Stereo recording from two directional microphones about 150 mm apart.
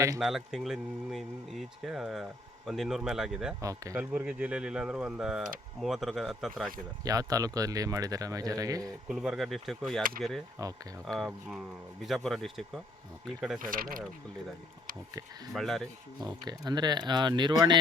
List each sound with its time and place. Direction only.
0.2 s speech: centre (ahead or behind)
3.6 s speech: 20° right (ahead or behind)
4.0 s speech: 5° right (ahead or behind)
7.0 s speech: 25° right (ahead or behind)
9.0 s speech: 5° right (ahead or behind)
13.6 s speech: 65° right (ahead or behind)
15.5 s speech: centre (ahead or behind)
16.2 s speech: 30° right (ahead or behind)